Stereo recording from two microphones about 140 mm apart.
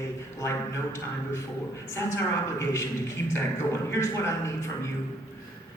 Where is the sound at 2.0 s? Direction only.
20° left (ahead or behind).